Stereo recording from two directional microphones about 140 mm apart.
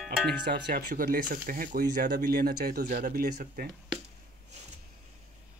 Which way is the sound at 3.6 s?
90° right.